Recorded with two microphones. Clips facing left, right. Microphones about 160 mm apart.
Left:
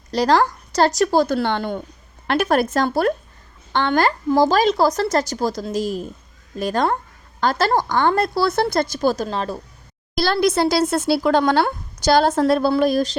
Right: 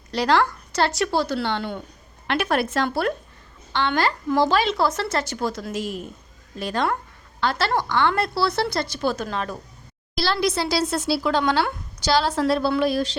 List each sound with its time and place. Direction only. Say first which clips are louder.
0.1 s a woman's voice: left 3 dB; 40° left (ahead or behind)
10.2 s speech: left 5 dB; 50° left (ahead or behind)